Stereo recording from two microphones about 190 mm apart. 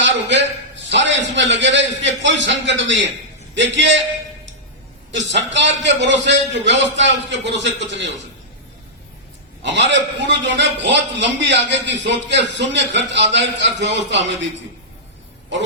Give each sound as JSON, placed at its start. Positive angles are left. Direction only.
{"t": 0.0, "sound": "a sound", "side_deg": -70}
{"t": 0.9, "sound": "a man's voice", "side_deg": -75}
{"t": 5.3, "sound": "a man's voice", "side_deg": -70}
{"t": 9.6, "sound": "a man's voice", "side_deg": -70}